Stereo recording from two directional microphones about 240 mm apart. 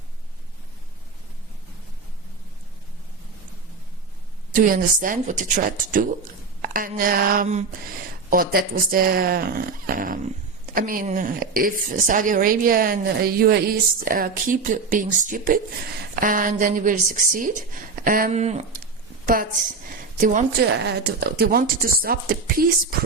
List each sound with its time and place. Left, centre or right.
4.5 s a woman's voice: right